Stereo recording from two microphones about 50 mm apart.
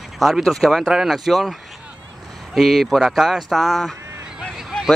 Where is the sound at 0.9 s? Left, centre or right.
Centre.